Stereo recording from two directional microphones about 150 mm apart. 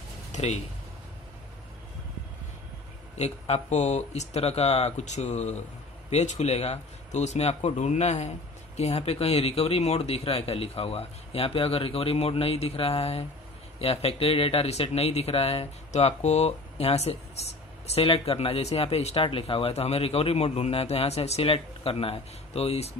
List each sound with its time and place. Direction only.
0.3 s speech: 50° left (ahead or behind)
3.2 s speech: 45° left (ahead or behind)